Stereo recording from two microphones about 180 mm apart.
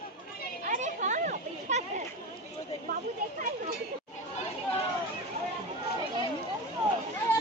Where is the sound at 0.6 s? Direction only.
45° right (ahead or behind).